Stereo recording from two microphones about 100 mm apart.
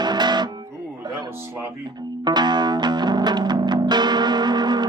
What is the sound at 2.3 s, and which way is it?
Music, 45° right (ahead or behind).